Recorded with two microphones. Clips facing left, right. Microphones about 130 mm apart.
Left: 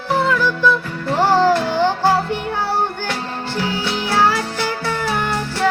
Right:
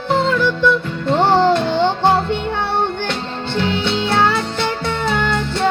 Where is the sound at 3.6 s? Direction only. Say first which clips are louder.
Right 4 dB; 25° right (ahead or behind).